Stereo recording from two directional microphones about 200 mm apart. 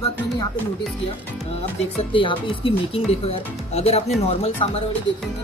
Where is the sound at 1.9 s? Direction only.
25° left (ahead or behind).